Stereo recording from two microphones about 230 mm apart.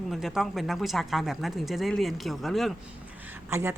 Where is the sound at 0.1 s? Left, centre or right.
Centre.